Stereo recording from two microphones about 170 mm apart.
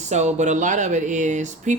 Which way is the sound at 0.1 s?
40° right (ahead or behind).